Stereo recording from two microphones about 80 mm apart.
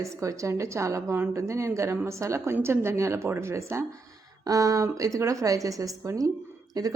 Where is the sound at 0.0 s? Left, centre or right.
Right.